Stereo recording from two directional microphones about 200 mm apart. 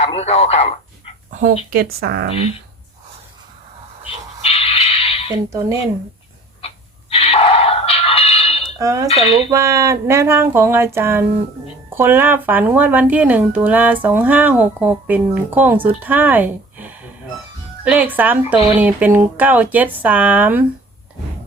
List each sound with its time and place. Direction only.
0.0 s speech: 30° left (ahead or behind)
1.3 s a sound: 40° right (ahead or behind)
1.7 s speech: 50° right (ahead or behind)
4.4 s a sound: 30° left (ahead or behind)
5.5 s speech: 15° right (ahead or behind)
6.6 s a sound: 30° left (ahead or behind)
8.8 s speech: 15° right (ahead or behind)
9.0 s dishes: 30° left (ahead or behind)
9.5 s speech: 15° right (ahead or behind)